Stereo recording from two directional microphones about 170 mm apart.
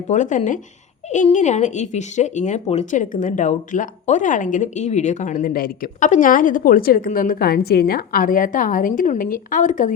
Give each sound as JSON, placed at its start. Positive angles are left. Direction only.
{"t": 0.1, "sound": "speech", "side_deg": 45}